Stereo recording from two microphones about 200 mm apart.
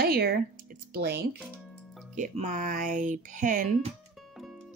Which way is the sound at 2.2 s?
40° right (ahead or behind).